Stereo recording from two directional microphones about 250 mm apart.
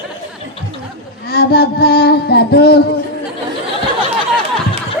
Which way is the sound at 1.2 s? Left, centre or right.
Left.